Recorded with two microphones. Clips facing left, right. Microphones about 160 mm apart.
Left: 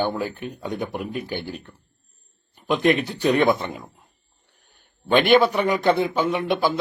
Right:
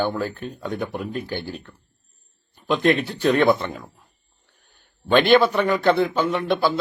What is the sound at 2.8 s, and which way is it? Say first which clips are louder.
Speech: even; 15° left (ahead or behind).